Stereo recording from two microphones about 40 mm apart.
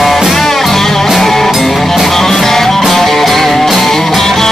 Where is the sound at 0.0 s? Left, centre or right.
Centre.